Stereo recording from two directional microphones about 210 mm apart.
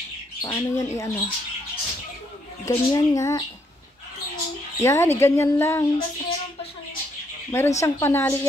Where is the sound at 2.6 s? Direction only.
15° left (ahead or behind).